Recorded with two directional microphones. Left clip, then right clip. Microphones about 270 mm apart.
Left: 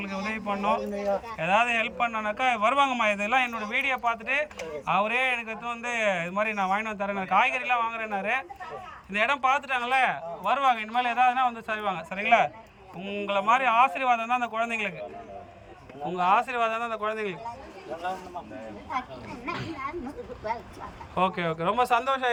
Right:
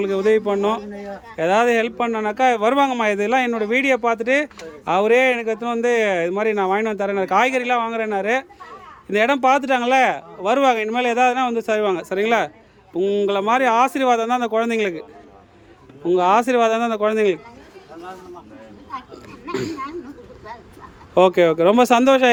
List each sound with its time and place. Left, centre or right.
0.0 s speech: right
16.0 s speech: right
19.5 s speech: right
21.2 s speech: right